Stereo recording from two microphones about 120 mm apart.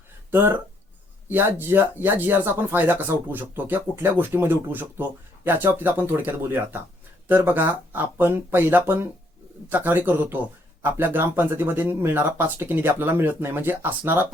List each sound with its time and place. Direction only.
0.3 s speech: 20° right (ahead or behind)